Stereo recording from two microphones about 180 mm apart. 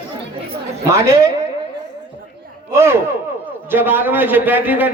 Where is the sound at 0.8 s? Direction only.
15° right (ahead or behind).